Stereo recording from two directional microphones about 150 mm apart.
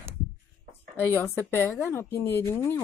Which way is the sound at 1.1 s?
15° left (ahead or behind).